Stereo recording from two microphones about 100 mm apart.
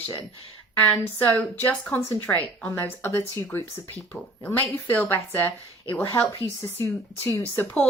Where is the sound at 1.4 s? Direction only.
10° left (ahead or behind).